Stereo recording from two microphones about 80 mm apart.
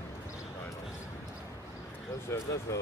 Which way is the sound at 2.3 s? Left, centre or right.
Left.